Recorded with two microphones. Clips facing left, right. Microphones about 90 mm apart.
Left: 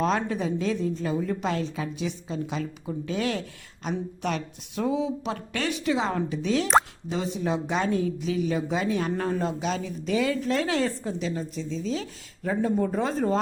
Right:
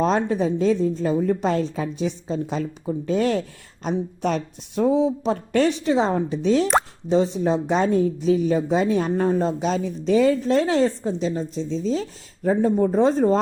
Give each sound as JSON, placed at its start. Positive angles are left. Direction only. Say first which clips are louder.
{"t": 0.0, "sound": "a woman's voice", "louder": "right 5 dB", "side_deg": -35}